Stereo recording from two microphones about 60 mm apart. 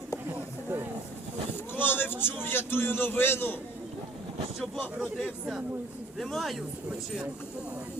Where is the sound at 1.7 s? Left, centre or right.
Left.